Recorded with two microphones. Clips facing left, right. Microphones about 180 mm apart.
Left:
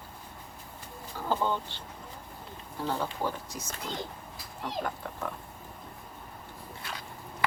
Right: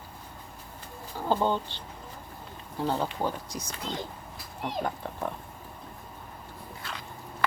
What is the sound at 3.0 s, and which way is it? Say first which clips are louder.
Speech: right 2 dB; 15° right (ahead or behind).